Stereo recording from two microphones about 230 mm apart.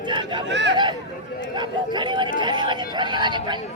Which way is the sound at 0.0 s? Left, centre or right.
Centre.